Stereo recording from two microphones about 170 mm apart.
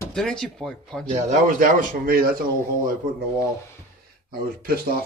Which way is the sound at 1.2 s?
45° right (ahead or behind).